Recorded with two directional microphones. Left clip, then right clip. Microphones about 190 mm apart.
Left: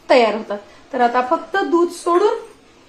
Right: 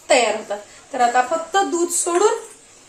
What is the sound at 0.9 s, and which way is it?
Speech, 20° left (ahead or behind).